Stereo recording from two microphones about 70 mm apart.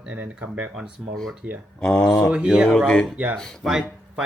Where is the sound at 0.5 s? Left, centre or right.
Centre.